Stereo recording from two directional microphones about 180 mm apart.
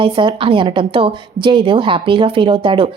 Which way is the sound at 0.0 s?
25° right (ahead or behind).